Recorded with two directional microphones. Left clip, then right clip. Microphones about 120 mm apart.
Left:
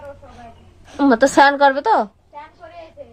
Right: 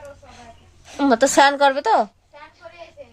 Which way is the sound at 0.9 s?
20° right (ahead or behind).